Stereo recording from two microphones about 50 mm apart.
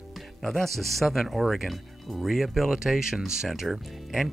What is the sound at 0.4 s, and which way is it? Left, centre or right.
Speech, centre.